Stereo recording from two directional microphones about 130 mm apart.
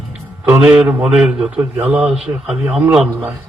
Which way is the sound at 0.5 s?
10° right (ahead or behind).